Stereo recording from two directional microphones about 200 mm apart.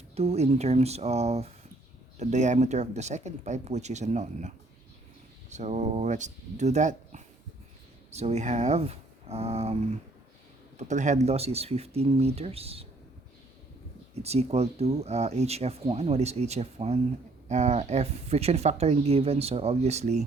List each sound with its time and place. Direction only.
0.2 s speech: 30° right (ahead or behind)
10.8 s speech: 35° right (ahead or behind)
14.2 s speech: 30° right (ahead or behind)